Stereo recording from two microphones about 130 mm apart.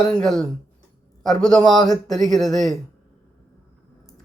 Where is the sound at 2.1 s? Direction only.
Centre (ahead or behind).